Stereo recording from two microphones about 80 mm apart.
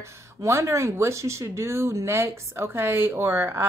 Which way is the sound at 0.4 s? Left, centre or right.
Right.